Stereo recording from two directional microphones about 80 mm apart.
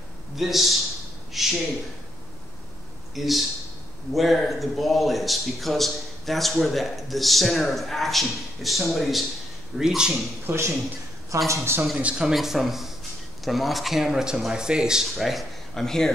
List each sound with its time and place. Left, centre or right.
0.4 s a man's voice: centre
3.2 s a man's voice: centre
10.4 s a man's voice: right
12.2 s a man's voice: centre